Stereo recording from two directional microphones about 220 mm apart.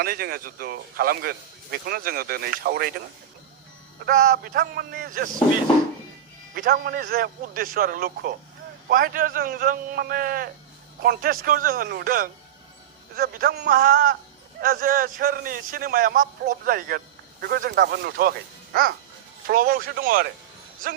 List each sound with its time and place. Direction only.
0.0 s a man's voice: 40° right (ahead or behind)
4.0 s a man's voice: 40° right (ahead or behind)
6.5 s a man's voice: 45° right (ahead or behind)